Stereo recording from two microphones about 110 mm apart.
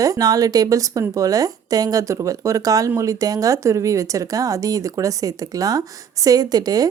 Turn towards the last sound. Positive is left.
turn(degrees=-35)  # may be behind; listen again after turning